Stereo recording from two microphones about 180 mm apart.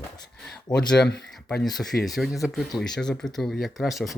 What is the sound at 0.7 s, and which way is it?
Speech, 5° left (ahead or behind).